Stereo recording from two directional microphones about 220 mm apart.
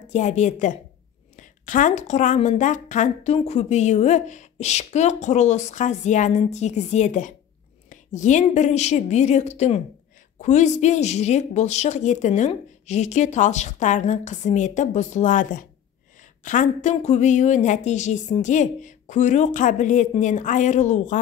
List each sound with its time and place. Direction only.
0.1 s a woman's voice: 30° left (ahead or behind)